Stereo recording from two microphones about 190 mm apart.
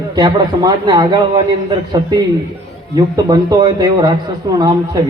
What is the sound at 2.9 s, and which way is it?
A man's voice, 20° right (ahead or behind).